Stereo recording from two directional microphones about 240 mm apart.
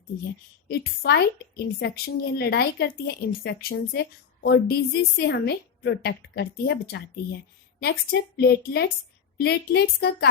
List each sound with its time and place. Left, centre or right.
0.7 s a woman's voice: left
8.4 s a woman's voice: left